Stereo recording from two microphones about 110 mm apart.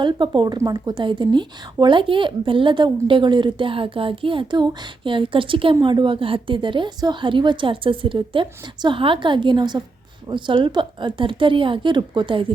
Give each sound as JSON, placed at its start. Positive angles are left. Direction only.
{"t": 0.0, "sound": "a woman's voice", "side_deg": -45}